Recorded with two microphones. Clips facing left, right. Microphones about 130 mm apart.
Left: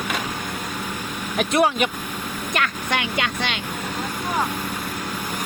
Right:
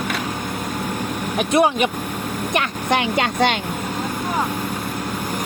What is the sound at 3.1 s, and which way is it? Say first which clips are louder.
Speech: right 7 dB; 40° right (ahead or behind).